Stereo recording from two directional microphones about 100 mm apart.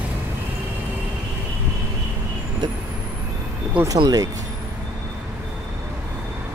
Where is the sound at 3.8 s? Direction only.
40° right (ahead or behind).